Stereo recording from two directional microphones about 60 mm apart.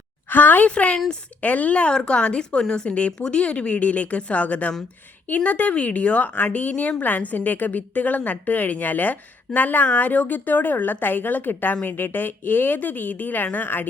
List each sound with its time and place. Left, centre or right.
0.3 s speech: left
0.7 s a woman's voice: centre
1.4 s a woman's voice: left